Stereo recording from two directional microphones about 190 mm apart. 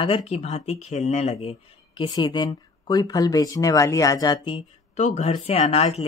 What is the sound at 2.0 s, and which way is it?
Speech, 20° left (ahead or behind).